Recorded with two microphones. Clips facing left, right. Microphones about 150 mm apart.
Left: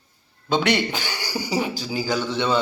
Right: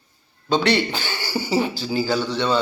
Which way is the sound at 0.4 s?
15° left (ahead or behind).